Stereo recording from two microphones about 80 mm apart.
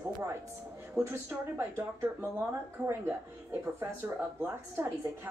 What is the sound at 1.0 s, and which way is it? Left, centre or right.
Speech, right.